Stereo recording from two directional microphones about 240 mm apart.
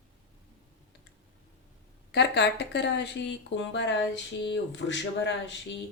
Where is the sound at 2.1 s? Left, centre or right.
Left.